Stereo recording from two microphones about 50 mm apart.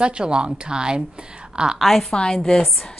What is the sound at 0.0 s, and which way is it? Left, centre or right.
A woman's voice, centre.